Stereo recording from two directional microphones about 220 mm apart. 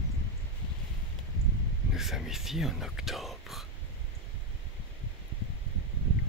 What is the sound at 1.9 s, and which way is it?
Speech, centre (ahead or behind).